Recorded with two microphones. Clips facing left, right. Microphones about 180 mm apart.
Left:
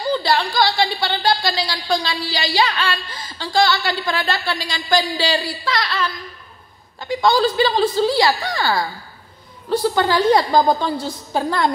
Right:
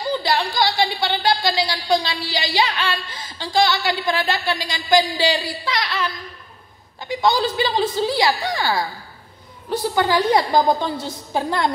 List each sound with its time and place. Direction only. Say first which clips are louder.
0.2 s a woman's voice: left 2 dB; 15° right (ahead or behind)